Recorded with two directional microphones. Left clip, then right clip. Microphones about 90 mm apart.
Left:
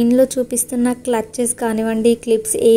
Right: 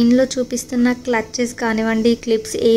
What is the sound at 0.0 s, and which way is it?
A woman's voice, 25° left (ahead or behind).